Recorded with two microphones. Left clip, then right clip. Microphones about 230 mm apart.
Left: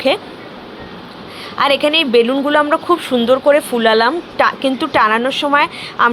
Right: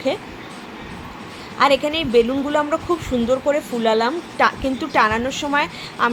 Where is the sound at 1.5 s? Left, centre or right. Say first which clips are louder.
Left 4 dB; centre.